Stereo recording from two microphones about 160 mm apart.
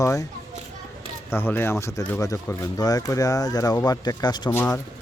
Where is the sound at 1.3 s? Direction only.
15° left (ahead or behind).